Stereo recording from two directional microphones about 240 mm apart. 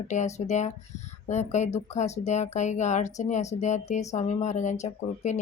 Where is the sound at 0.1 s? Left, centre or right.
Left.